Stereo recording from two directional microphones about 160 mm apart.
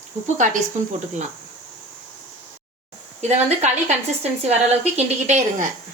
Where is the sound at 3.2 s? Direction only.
45° right (ahead or behind).